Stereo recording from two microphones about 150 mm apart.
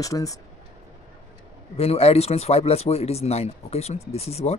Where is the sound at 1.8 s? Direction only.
40° left (ahead or behind).